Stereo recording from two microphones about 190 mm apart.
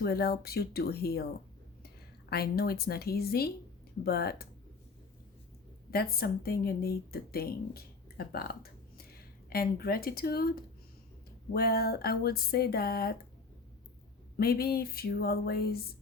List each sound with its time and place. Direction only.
0.0 s speech: 55° left (ahead or behind)
2.3 s speech: 55° left (ahead or behind)
5.9 s speech: 55° left (ahead or behind)
14.3 s speech: 50° left (ahead or behind)